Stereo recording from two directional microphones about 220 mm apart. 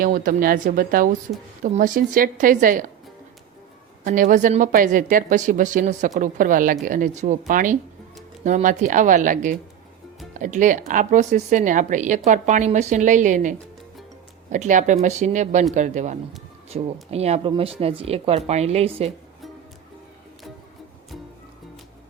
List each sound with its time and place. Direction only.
0.0 s speech: 40° right (ahead or behind)
4.0 s speech: 40° right (ahead or behind)